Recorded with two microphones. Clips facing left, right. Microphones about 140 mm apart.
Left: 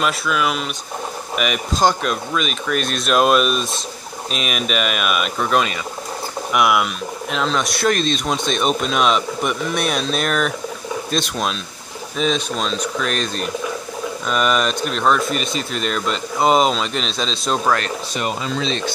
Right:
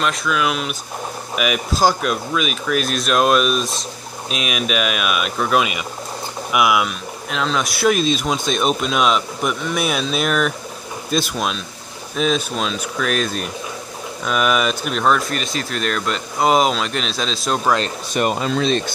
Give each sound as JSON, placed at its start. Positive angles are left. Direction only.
{"t": 0.0, "sound": "speech", "side_deg": 0}
{"t": 18.1, "sound": "speech", "side_deg": -50}